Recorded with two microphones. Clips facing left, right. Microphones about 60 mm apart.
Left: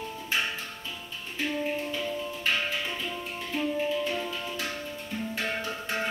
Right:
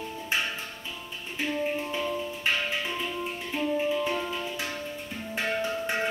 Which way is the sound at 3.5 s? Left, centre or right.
Centre.